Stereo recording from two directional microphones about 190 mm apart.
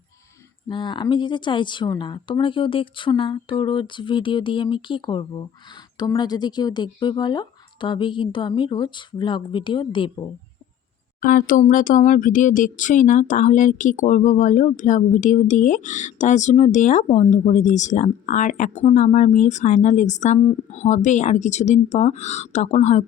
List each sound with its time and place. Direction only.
0.7 s speech: 25° left (ahead or behind)
11.2 s speech: 45° left (ahead or behind)